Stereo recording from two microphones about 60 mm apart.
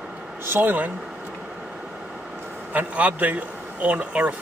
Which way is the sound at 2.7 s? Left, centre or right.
Right.